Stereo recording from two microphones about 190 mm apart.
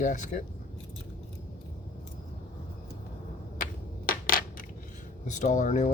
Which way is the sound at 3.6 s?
50° left (ahead or behind).